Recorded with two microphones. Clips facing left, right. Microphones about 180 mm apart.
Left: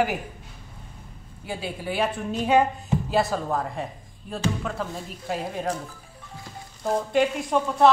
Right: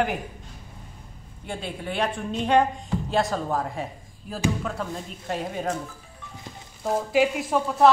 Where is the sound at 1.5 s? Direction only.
5° left (ahead or behind).